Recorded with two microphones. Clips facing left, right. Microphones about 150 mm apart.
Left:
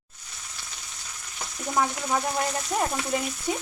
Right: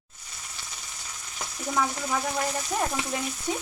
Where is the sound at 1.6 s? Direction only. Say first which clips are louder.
Left 2 dB; 5° left (ahead or behind).